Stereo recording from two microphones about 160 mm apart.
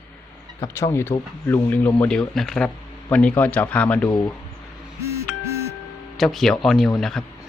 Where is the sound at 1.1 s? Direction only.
25° left (ahead or behind).